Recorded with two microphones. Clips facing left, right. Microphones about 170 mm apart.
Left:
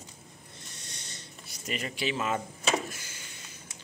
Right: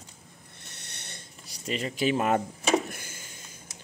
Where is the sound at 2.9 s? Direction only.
55° right (ahead or behind).